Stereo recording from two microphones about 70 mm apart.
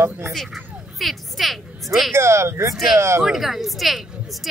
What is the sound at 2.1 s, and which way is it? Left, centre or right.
Speech, right.